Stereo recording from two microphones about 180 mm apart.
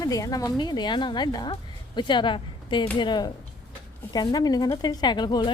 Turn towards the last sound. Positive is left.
turn(degrees=25)  # may be behind; listen again after turning